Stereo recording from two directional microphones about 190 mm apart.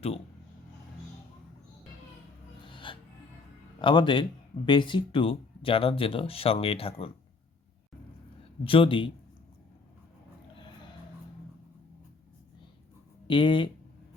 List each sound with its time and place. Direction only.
2.6 s music: 25° left (ahead or behind)
3.8 s speech: 25° left (ahead or behind)
8.6 s speech: 30° left (ahead or behind)
13.2 s speech: 25° left (ahead or behind)